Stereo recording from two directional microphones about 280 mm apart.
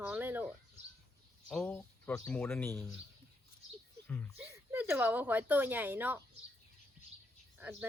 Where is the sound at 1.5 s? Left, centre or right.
Centre.